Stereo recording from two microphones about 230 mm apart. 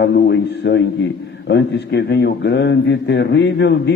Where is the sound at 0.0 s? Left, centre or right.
Left.